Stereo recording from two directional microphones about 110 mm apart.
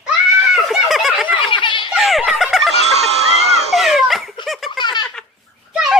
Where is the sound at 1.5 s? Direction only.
50° left (ahead or behind).